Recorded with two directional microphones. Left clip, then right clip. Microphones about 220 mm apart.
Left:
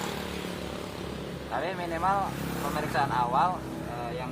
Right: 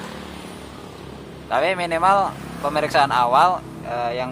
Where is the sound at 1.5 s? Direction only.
35° right (ahead or behind).